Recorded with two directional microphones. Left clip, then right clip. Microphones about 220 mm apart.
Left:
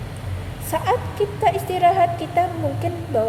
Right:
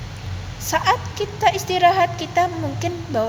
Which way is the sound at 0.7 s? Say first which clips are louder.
Right 2 dB; 15° right (ahead or behind).